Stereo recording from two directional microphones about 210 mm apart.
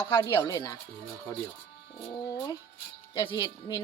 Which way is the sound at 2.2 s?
15° left (ahead or behind).